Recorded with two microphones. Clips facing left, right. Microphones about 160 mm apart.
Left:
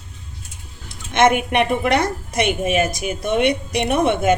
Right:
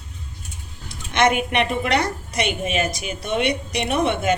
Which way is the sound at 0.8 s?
50° left (ahead or behind).